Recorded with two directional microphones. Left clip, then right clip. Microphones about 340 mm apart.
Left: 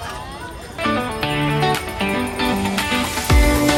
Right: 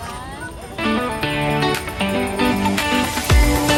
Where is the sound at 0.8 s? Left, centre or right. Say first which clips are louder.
Even; centre.